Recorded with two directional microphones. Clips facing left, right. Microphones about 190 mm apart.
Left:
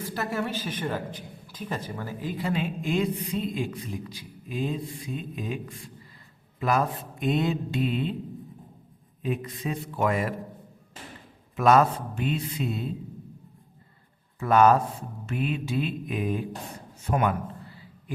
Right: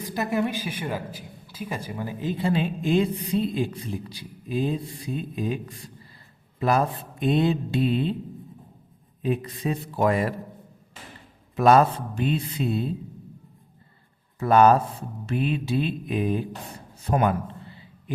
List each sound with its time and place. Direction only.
0.0 s a man's voice: 15° right (ahead or behind); by 8.1 s 30° right (ahead or behind)
9.2 s speech: 35° right (ahead or behind)
11.5 s speech: 35° right (ahead or behind)
14.3 s speech: 35° right (ahead or behind)
17.1 s a sound: 35° right (ahead or behind)